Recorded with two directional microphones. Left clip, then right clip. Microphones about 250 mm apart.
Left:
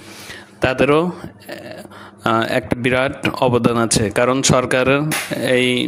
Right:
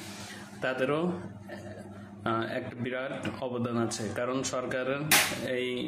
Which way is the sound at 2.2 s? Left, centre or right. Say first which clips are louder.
Left 14 dB; left.